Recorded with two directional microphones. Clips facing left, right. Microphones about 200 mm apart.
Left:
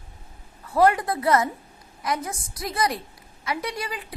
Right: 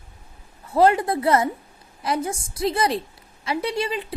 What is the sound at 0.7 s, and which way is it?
A woman's voice, 25° right (ahead or behind).